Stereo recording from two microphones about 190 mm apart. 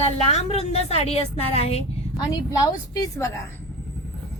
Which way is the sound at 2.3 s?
20° left (ahead or behind).